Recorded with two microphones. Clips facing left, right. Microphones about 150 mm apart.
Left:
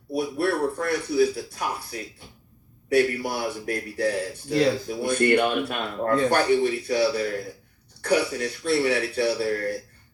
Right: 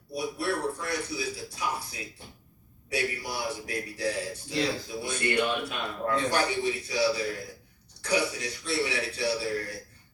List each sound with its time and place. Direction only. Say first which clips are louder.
0.1 s a man's voice: left 6 dB; 55° left (ahead or behind)